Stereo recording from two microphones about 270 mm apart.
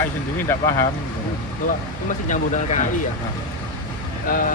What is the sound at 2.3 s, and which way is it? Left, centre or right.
Speech, left.